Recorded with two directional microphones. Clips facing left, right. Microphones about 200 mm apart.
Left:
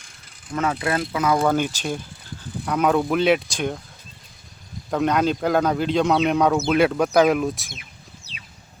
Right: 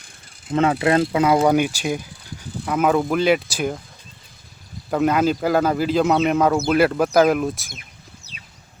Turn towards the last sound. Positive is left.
turn(degrees=0)  # may be behind; listen again after turning